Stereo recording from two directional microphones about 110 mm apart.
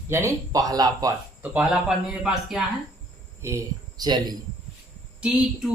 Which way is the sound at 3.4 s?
25° right (ahead or behind).